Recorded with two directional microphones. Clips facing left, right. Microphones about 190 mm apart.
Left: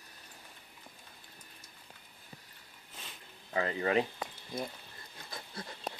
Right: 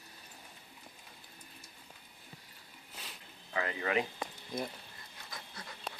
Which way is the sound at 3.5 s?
35° left (ahead or behind).